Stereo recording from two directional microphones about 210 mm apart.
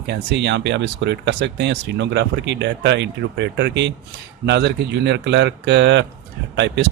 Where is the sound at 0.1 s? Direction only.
55° right (ahead or behind).